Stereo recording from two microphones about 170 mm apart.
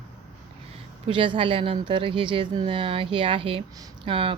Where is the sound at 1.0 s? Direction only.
30° right (ahead or behind).